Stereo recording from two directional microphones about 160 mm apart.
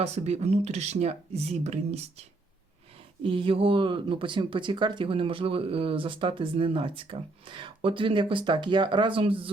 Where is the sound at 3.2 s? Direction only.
35° right (ahead or behind).